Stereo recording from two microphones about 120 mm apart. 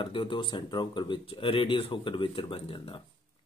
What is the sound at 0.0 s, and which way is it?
Speech, 45° left (ahead or behind).